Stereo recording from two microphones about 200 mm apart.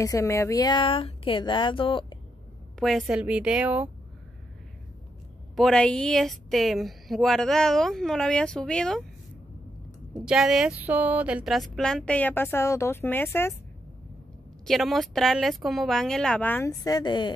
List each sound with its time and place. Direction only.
0.0 s speech: 15° left (ahead or behind)
2.8 s speech: centre (ahead or behind)
5.6 s speech: 5° left (ahead or behind)
10.1 s speech: 5° right (ahead or behind)
14.7 s speech: centre (ahead or behind); by 17.3 s 20° left (ahead or behind)